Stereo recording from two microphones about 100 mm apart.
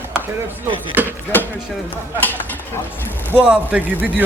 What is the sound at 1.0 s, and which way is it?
Speech, 20° right (ahead or behind).